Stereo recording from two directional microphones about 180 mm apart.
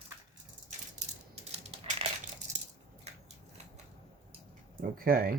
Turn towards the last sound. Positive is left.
turn(degrees=-55)  # may be behind; listen again after turning